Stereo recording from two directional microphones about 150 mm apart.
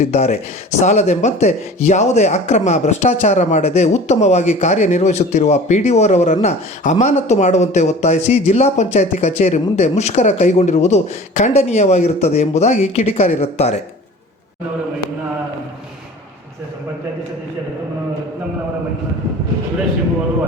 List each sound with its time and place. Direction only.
0.0 s speech: 50° left (ahead or behind)